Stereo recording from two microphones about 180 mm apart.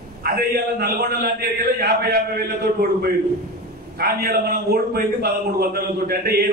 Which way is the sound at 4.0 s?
60° right (ahead or behind).